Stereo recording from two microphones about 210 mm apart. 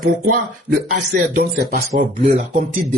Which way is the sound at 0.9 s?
50° right (ahead or behind).